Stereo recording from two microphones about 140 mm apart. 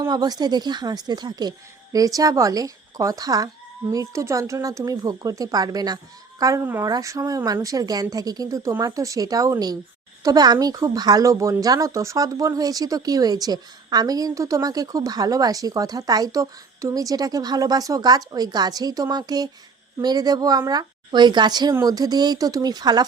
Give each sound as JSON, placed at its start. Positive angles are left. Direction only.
{"t": 0.0, "sound": "speech", "side_deg": -30}